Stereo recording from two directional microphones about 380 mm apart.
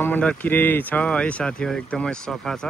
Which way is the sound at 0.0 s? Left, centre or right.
Centre.